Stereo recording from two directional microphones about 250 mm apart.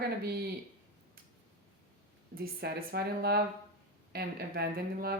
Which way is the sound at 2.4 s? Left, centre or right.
Right.